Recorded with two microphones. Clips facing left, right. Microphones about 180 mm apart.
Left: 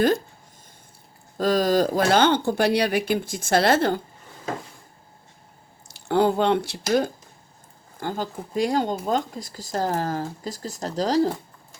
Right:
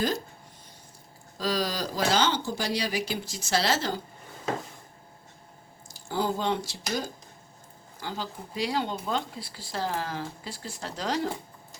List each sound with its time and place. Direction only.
1.4 s speech: 50° left (ahead or behind)
5.9 s speech: 65° left (ahead or behind)
7.9 s speech: 50° left (ahead or behind)